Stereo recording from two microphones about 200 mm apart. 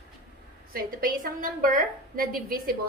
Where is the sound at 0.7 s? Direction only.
45° right (ahead or behind).